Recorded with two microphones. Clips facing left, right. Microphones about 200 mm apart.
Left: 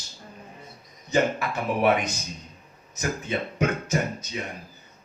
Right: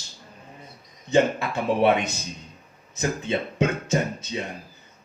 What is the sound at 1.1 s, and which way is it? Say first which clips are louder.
Speech: right 3 dB; 25° right (ahead or behind).